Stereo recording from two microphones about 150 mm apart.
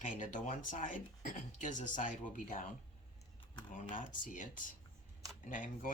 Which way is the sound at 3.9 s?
60° left (ahead or behind).